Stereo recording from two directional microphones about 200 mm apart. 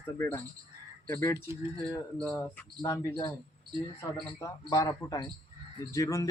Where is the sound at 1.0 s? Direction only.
15° left (ahead or behind).